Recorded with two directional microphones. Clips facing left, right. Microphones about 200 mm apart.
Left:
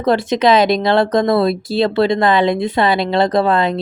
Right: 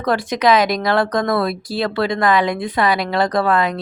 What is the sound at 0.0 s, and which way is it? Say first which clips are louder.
Speech: left 3 dB; 25° left (ahead or behind).